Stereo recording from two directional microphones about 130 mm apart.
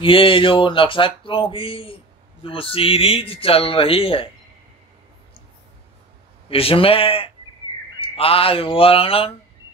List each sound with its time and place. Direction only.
0.0 s speech: 45° left (ahead or behind)
6.5 s speech: 45° left (ahead or behind)